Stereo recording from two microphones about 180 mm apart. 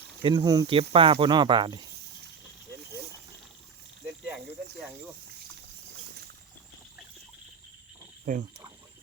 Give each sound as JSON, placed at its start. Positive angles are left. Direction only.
{"t": 0.2, "sound": "speech", "side_deg": -25}
{"t": 0.8, "sound": "speech", "side_deg": -30}
{"t": 8.3, "sound": "speech", "side_deg": -50}